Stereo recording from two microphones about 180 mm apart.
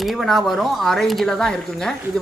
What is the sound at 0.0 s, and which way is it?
Speech, centre (ahead or behind).